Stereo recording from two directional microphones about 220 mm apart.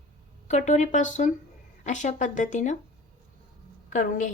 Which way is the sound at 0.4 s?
30° left (ahead or behind).